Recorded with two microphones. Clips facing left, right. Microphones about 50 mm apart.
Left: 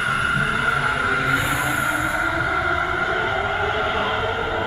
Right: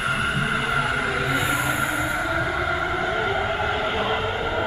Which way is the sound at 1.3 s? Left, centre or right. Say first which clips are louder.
Left 2 dB; centre.